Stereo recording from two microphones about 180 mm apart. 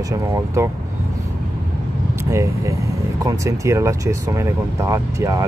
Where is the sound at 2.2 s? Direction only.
15° right (ahead or behind).